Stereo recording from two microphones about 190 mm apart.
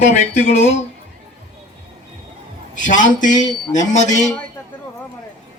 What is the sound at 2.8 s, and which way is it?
Speech, 45° left (ahead or behind).